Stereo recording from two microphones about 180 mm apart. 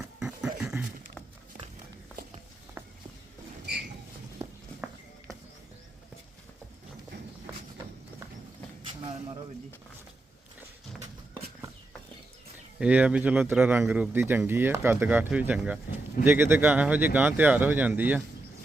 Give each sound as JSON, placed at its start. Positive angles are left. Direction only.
{"t": 0.2, "sound": "a sound", "side_deg": -5}
{"t": 2.8, "sound": "walk", "side_deg": -10}
{"t": 12.8, "sound": "speech", "side_deg": -5}